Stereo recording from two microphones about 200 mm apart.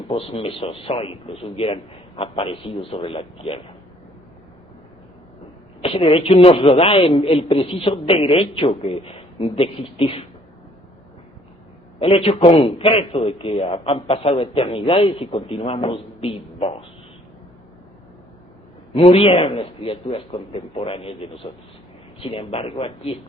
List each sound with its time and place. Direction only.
0.1 s a man's voice: 30° left (ahead or behind)
5.8 s a man's voice: 25° left (ahead or behind)
11.9 s a man's voice: 30° left (ahead or behind)
18.9 s a man's voice: 30° left (ahead or behind)